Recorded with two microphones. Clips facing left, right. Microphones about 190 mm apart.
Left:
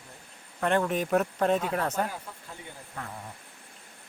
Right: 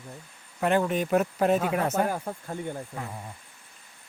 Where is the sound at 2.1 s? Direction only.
50° right (ahead or behind).